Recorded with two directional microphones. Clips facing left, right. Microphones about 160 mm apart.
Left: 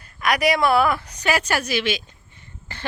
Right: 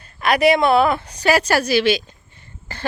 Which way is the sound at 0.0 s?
25° right (ahead or behind).